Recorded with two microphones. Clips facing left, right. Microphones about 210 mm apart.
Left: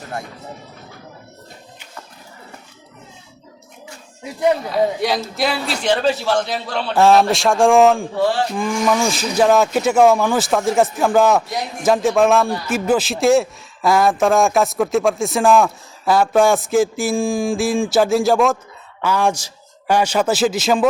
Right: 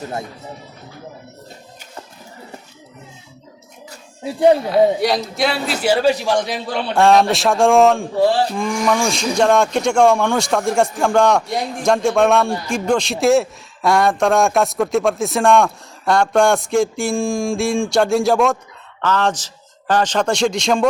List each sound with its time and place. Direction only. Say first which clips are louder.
3.8 s music: right 6 dB; 30° right (ahead or behind)
4.7 s a man's voice: right 4 dB; centre (ahead or behind)
6.9 s speech: even; centre (ahead or behind)